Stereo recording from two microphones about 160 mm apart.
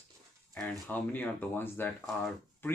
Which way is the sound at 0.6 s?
10° left (ahead or behind).